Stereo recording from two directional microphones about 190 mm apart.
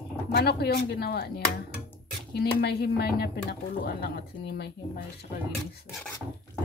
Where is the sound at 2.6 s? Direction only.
55° left (ahead or behind).